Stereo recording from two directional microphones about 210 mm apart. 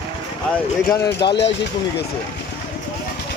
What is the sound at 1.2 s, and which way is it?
Speech, 20° left (ahead or behind).